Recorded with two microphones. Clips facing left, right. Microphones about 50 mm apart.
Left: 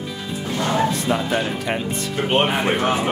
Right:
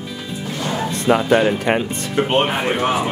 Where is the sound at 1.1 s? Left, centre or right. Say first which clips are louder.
Right 6 dB; right.